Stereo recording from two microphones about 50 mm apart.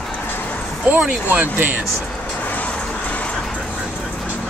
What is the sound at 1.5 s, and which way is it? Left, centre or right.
Speech, right.